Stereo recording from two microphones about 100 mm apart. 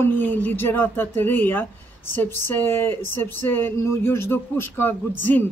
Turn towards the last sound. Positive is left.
turn(degrees=20)  # may be behind; listen again after turning